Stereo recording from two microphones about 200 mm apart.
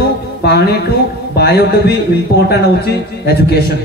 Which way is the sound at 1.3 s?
55° left (ahead or behind).